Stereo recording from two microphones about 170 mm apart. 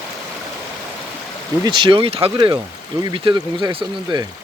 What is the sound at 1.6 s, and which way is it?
Speech, 30° right (ahead or behind).